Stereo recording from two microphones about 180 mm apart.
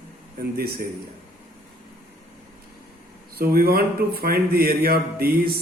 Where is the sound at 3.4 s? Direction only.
60° right (ahead or behind).